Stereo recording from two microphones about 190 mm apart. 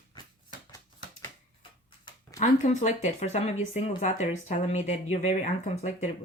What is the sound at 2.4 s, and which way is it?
Speech, 40° left (ahead or behind).